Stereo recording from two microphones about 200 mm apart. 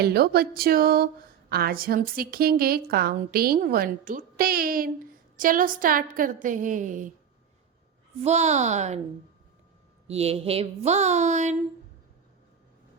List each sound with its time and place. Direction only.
0.0 s a woman's voice: 50° right (ahead or behind)
8.2 s a woman's voice: 35° right (ahead or behind)
10.1 s a woman's voice: 30° right (ahead or behind)